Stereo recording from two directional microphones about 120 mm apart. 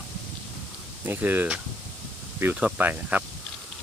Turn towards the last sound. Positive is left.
turn(degrees=-15)  # may be behind; listen again after turning